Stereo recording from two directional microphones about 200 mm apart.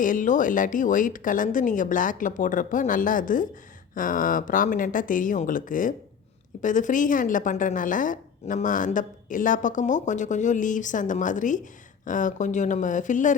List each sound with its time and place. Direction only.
0.0 s speech: 40° left (ahead or behind)